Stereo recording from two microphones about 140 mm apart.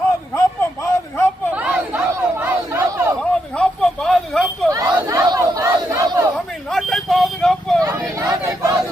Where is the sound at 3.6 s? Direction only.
5° left (ahead or behind).